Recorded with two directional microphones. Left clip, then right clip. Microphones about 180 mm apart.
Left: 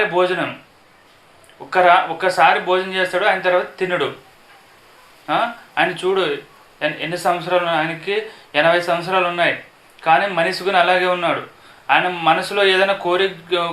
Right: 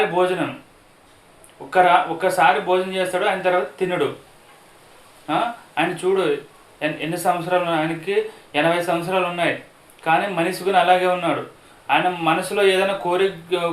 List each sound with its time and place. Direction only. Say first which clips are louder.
0.1 s speech: left 2 dB; 10° left (ahead or behind)
1.7 s speech: left 2 dB; 10° left (ahead or behind)
5.2 s speech: left 3 dB; 10° left (ahead or behind)